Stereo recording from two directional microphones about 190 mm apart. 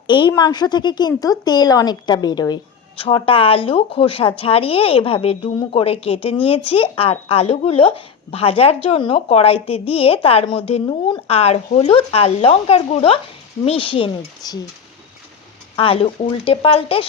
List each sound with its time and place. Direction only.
0.1 s speech: 20° left (ahead or behind)
15.7 s speech: 30° left (ahead or behind)